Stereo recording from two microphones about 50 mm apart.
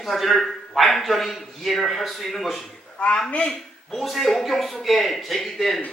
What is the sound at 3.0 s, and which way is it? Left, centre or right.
Speech, centre.